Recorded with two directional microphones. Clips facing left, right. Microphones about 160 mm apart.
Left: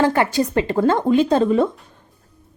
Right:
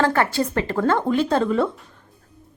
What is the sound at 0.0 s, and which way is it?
A woman's voice, 15° left (ahead or behind).